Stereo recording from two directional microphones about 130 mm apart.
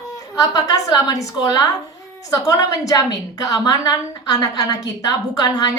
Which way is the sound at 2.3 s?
25° left (ahead or behind).